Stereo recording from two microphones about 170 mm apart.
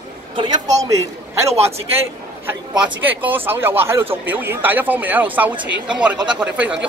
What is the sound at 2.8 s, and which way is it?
Speech, 10° right (ahead or behind).